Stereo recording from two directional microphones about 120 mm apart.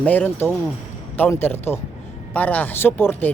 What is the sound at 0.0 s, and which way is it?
A man's voice, 15° left (ahead or behind).